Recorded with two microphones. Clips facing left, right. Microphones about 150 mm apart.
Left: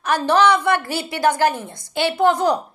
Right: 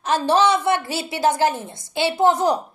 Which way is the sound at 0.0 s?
25° right (ahead or behind).